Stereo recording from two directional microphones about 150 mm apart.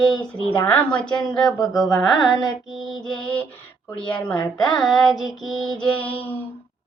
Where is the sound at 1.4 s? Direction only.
25° left (ahead or behind).